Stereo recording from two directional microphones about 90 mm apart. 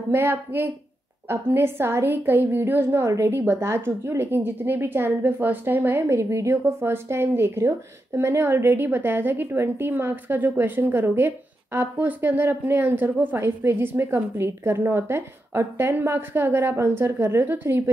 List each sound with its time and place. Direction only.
0.1 s a woman's voice: 25° right (ahead or behind)